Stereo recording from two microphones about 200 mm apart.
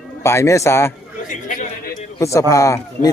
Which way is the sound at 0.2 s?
15° left (ahead or behind).